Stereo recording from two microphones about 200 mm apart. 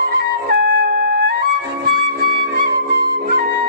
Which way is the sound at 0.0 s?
50° right (ahead or behind).